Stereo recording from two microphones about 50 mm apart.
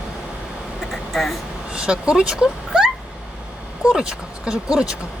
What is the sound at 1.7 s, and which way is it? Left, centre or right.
Speech, right.